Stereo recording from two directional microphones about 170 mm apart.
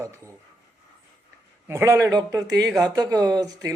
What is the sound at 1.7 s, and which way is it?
Speech, 15° right (ahead or behind).